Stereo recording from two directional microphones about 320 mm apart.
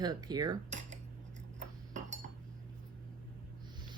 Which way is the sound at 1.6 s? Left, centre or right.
Right.